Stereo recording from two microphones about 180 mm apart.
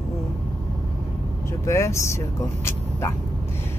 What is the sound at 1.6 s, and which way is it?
Speech, 15° left (ahead or behind).